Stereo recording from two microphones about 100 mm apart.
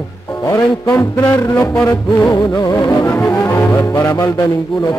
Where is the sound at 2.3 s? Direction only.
45° left (ahead or behind).